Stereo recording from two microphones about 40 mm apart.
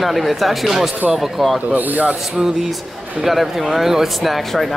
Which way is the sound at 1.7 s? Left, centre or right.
Right.